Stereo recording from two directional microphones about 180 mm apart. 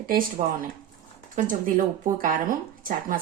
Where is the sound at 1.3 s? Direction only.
45° right (ahead or behind).